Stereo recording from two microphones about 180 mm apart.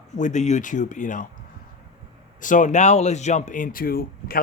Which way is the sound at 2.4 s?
45° left (ahead or behind).